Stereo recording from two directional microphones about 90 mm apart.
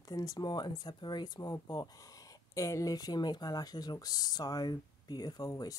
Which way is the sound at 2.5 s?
35° left (ahead or behind).